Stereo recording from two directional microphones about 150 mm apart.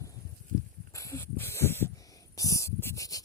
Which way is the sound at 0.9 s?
20° left (ahead or behind).